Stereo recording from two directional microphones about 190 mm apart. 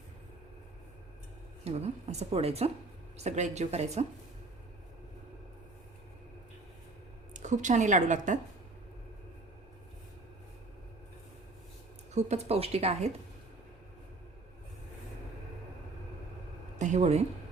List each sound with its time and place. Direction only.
1.6 s a woman's voice: 35° right (ahead or behind)
7.3 s a woman's voice: 40° right (ahead or behind)
12.1 s a woman's voice: 35° right (ahead or behind)
16.7 s a sound: 40° right (ahead or behind)